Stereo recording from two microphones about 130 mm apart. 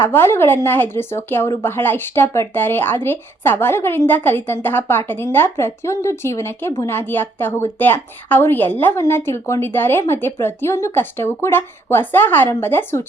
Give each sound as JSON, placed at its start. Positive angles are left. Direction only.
{"t": 0.0, "sound": "speech", "side_deg": 20}